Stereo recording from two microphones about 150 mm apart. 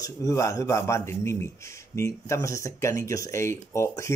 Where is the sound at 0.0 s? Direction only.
20° left (ahead or behind).